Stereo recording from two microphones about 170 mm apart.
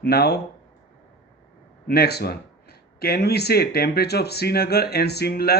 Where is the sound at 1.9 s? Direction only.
70° left (ahead or behind).